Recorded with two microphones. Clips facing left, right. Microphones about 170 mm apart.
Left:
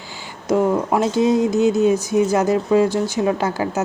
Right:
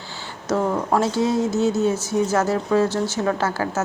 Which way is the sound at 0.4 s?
10° left (ahead or behind).